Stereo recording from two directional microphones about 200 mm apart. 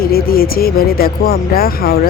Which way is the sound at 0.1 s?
50° left (ahead or behind).